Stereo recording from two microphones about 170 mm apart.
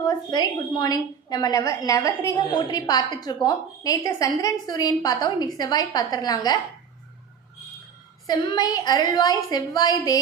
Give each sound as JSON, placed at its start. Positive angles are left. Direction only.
{"t": 0.0, "sound": "a woman's voice", "side_deg": 25}
{"t": 8.3, "sound": "a woman's voice", "side_deg": 25}